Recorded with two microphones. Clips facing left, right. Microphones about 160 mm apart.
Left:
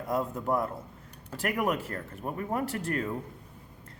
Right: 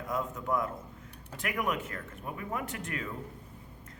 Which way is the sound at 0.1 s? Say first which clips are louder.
Left 4 dB; 35° left (ahead or behind).